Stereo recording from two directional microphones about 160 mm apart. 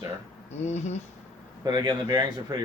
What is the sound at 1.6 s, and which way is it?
Speech, 25° right (ahead or behind).